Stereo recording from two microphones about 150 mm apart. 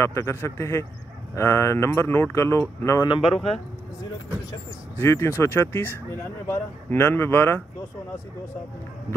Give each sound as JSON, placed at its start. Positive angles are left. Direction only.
{"t": 0.0, "sound": "speech", "side_deg": 20}
{"t": 3.1, "sound": "speech", "side_deg": 40}
{"t": 4.9, "sound": "speech", "side_deg": 15}